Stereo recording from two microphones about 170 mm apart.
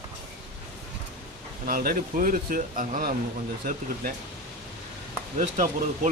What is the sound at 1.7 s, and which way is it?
Speech, 55° right (ahead or behind).